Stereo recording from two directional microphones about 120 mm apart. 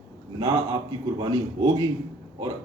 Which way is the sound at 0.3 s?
35° right (ahead or behind).